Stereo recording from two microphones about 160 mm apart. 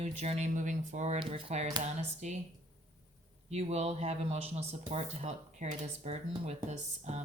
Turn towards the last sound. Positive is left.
turn(degrees=-45)  # may be behind; listen again after turning